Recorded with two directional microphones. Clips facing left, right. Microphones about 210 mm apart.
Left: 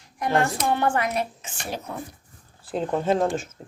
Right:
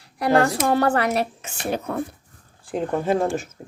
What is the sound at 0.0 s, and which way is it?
Speech, 35° right (ahead or behind).